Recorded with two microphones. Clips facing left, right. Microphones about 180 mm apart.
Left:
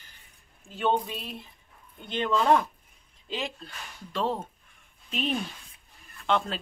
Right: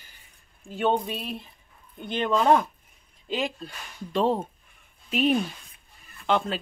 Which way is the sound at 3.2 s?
15° right (ahead or behind).